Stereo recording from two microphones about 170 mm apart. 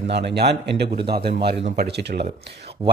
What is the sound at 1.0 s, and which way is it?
Speech, 70° right (ahead or behind).